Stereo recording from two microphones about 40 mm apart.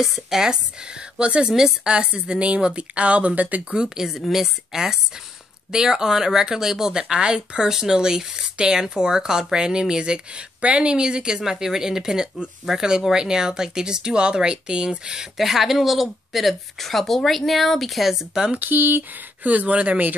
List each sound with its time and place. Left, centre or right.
0.0 s speech: centre
1.1 s speech: right
3.7 s speech: centre
18.6 s speech: right
19.4 s speech: right